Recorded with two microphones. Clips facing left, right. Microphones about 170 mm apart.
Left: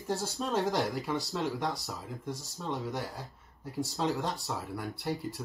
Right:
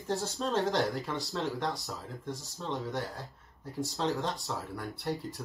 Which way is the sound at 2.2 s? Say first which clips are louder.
Left 1 dB; 20° right (ahead or behind).